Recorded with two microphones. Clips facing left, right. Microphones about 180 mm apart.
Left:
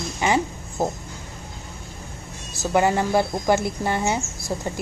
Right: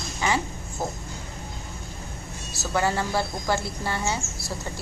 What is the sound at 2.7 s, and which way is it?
A woman's voice, 20° left (ahead or behind).